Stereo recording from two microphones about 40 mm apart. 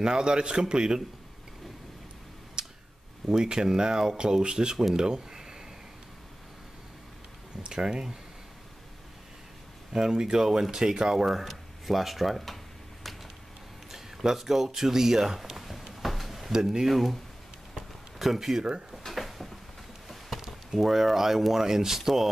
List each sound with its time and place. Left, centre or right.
0.0 s speech: right
2.6 s a sound: right
3.3 s speech: centre
4.9 s a sound: centre
7.6 s speech: centre
9.9 s speech: centre
11.4 s speech: centre
13.9 s speech: centre
16.0 s a sound: centre
16.5 s speech: centre
18.2 s speech: centre
19.0 s a sound: centre
20.4 s speech: centre